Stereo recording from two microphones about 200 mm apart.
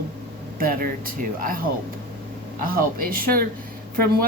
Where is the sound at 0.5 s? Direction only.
45° right (ahead or behind).